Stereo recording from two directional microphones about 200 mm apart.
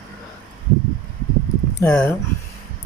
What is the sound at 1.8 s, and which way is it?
Speech, 15° left (ahead or behind).